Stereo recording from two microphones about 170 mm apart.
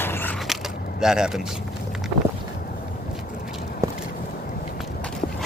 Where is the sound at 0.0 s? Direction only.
10° left (ahead or behind).